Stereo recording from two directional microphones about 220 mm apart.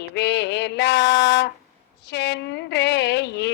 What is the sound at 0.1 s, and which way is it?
A woman's voice, 50° left (ahead or behind).